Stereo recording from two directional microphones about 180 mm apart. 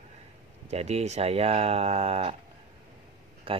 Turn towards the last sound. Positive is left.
turn(degrees=-30)  # may be behind; listen again after turning